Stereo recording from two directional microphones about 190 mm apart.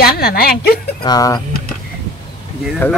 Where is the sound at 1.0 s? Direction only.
20° left (ahead or behind).